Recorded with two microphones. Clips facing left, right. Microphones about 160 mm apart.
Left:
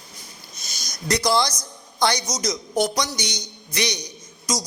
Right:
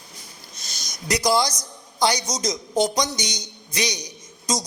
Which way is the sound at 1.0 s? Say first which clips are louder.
Even; 15° right (ahead or behind).